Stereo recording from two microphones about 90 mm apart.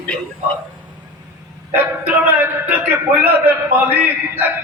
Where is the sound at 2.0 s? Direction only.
20° right (ahead or behind).